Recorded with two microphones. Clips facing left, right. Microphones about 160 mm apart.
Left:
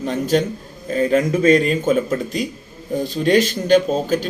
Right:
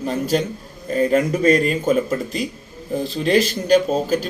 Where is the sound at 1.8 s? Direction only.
Centre (ahead or behind).